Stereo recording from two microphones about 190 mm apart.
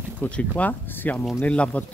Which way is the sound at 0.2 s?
5° left (ahead or behind).